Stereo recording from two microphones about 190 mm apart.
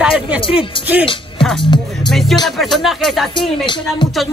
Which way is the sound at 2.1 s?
Centre (ahead or behind).